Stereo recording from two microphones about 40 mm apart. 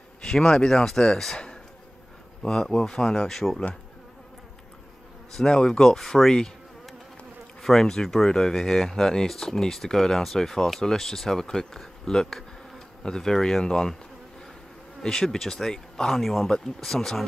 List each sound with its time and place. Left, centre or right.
0.2 s speech: centre
5.3 s speech: centre
7.6 s speech: centre
15.0 s speech: centre